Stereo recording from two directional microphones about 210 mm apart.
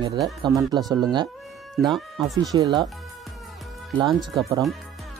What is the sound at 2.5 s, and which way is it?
Speech, 20° right (ahead or behind).